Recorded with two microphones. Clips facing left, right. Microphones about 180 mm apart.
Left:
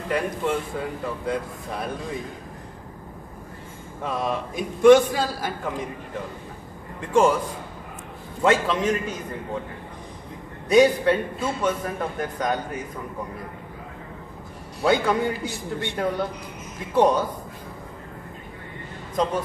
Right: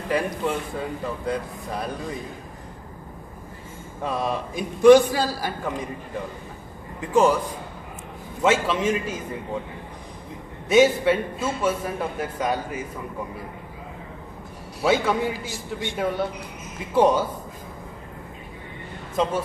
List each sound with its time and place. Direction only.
0.1 s speech: centre (ahead or behind)
4.0 s speech: centre (ahead or behind)
7.0 s speech: 5° right (ahead or behind)
8.4 s a man's voice: 5° right (ahead or behind)
10.7 s a man's voice: 5° right (ahead or behind)
14.8 s speech: 5° right (ahead or behind)
15.3 s a man's voice: 60° left (ahead or behind)
16.0 s a man's voice: 5° right (ahead or behind)